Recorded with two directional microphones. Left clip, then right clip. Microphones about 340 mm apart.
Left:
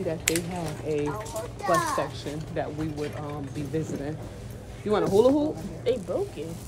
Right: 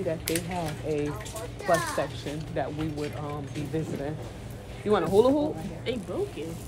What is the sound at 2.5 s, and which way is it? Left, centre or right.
Speech, centre.